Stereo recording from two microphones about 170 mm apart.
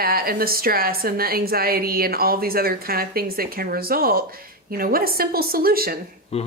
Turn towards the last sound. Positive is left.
turn(degrees=35)  # may be behind; listen again after turning